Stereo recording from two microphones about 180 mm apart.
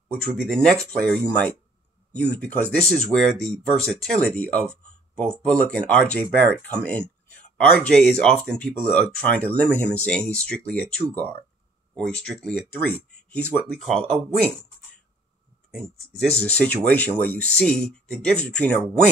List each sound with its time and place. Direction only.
0.2 s speech: 5° left (ahead or behind)
16.2 s speech: 5° left (ahead or behind)